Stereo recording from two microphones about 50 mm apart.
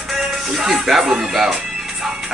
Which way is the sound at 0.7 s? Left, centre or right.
Centre.